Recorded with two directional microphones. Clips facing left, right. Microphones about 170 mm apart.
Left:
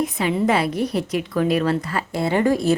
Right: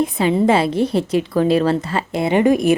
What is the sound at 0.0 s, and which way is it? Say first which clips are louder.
A woman's voice: right 5 dB; 30° right (ahead or behind).